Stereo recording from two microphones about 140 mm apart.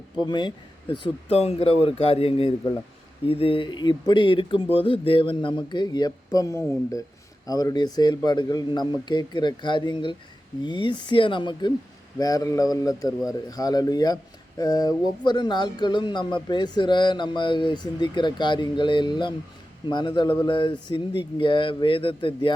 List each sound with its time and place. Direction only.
0.2 s a man's voice: 30° left (ahead or behind)